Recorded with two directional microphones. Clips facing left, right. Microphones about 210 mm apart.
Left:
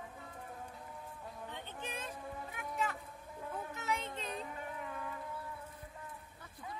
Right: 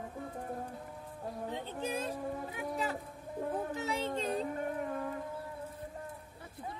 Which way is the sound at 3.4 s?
30° right (ahead or behind).